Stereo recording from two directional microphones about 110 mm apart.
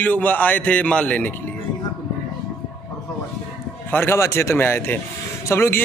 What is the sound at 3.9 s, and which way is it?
A man's voice, 20° left (ahead or behind).